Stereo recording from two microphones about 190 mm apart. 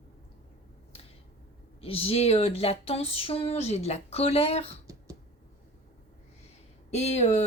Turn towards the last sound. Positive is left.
turn(degrees=35)  # may be behind; listen again after turning